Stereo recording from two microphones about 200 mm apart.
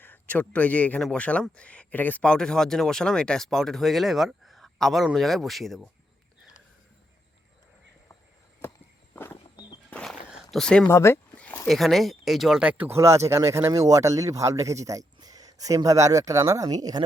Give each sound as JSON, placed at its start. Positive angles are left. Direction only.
{"t": 0.0, "sound": "a man's voice", "side_deg": 10}
{"t": 8.6, "sound": "walk", "side_deg": 10}
{"t": 9.9, "sound": "a sound", "side_deg": 0}
{"t": 10.8, "sound": "speech", "side_deg": 15}